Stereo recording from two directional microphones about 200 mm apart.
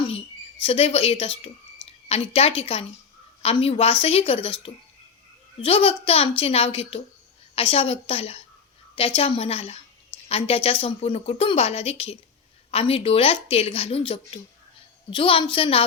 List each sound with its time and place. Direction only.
0.6 s speech: 30° left (ahead or behind)